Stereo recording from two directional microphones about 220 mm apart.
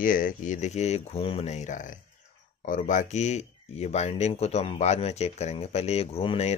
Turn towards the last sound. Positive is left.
turn(degrees=25)  # may be behind; listen again after turning